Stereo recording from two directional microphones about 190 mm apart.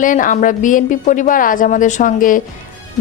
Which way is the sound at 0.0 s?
45° left (ahead or behind).